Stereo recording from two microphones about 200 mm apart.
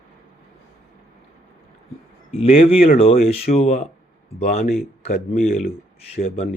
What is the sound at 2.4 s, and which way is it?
Speech, 30° left (ahead or behind).